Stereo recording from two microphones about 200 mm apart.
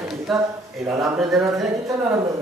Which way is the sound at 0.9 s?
15° right (ahead or behind).